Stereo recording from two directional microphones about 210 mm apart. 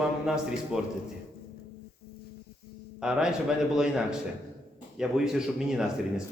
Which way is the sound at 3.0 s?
5° right (ahead or behind).